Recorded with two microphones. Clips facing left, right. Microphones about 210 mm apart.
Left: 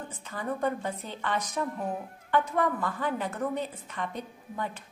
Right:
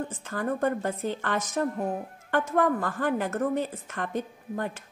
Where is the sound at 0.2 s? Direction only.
50° right (ahead or behind).